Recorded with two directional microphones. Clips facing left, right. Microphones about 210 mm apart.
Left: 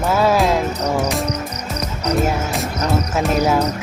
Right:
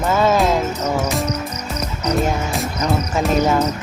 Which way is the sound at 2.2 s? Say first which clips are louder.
Left 1 dB; 5° left (ahead or behind).